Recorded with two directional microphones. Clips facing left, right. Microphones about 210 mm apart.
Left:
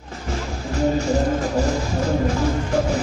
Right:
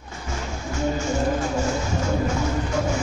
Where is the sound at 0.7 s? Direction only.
35° left (ahead or behind).